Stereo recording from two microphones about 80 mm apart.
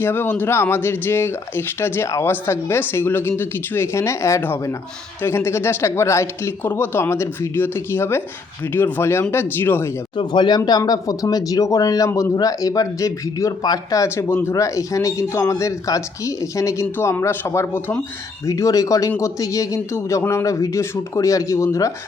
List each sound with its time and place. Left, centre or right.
0.0 s speech: left
6.6 s speech: left
10.2 s speech: left
10.7 s speech: left
14.3 s speech: left
14.5 s speech: left
18.4 s speech: left